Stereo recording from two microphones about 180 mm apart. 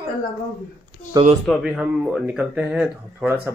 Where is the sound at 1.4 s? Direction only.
5° left (ahead or behind).